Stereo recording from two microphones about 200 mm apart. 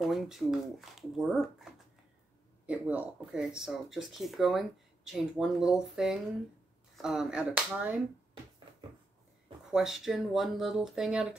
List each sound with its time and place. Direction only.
0.0 s speech: centre (ahead or behind)
9.7 s speech: centre (ahead or behind)